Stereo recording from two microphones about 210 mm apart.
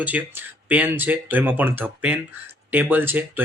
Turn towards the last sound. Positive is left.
turn(degrees=-10)  # may be behind; listen again after turning